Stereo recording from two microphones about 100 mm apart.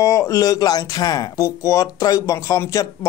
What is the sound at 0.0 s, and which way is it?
Speech, 35° left (ahead or behind).